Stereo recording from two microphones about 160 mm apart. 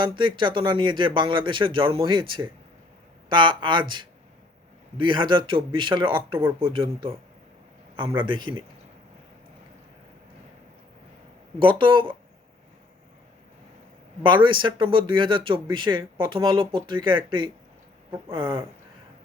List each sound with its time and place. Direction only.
0.0 s speech: 30° right (ahead or behind)
11.6 s speech: 30° right (ahead or behind)
14.4 s speech: 30° right (ahead or behind)
18.3 s speech: 30° right (ahead or behind)